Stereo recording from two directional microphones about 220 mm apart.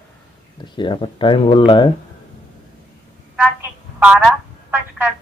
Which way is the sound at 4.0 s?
10° right (ahead or behind).